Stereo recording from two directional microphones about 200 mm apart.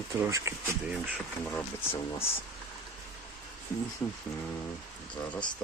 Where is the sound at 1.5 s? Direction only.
10° left (ahead or behind).